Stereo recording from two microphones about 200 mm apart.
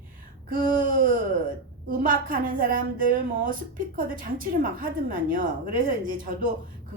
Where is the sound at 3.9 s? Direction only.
45° right (ahead or behind).